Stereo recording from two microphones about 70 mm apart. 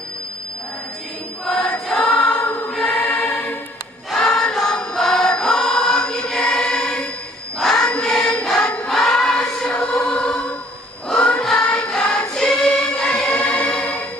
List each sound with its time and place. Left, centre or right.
1.5 s choir: centre
3.0 s choir: left
4.2 s choir: centre